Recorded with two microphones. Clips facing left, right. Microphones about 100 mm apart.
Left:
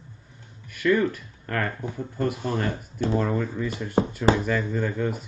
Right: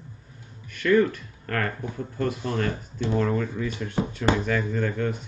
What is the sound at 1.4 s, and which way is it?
Speech, 20° left (ahead or behind).